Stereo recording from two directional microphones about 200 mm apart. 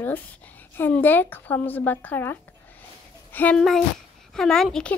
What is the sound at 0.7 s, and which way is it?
A woman's voice, 10° left (ahead or behind).